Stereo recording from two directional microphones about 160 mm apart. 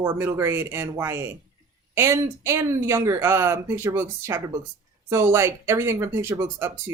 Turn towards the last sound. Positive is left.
turn(degrees=-15)  # may be behind; listen again after turning